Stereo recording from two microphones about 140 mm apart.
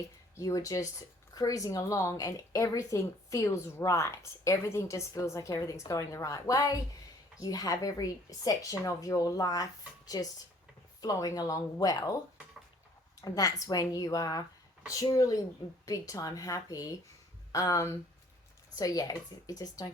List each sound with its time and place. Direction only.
0.3 s a woman's voice: 25° left (ahead or behind)
13.2 s a woman's voice: 25° left (ahead or behind)